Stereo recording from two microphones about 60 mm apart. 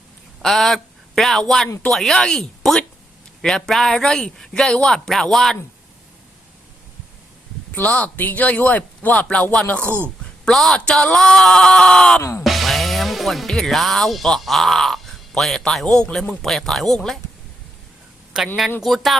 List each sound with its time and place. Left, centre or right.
0.4 s speech: centre
7.8 s speech: left
10.5 s speech: centre
12.4 s speech: centre
16.4 s speech: centre
18.3 s speech: centre